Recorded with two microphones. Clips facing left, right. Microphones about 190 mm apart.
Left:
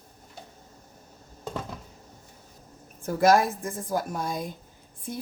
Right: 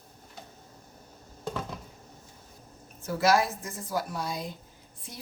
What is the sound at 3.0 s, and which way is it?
Speech, 50° left (ahead or behind).